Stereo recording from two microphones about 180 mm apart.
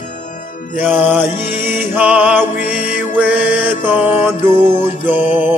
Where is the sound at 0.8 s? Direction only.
10° right (ahead or behind).